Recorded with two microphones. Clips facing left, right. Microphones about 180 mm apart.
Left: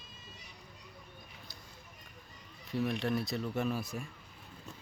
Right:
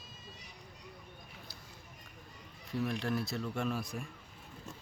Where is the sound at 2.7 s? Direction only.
Centre (ahead or behind).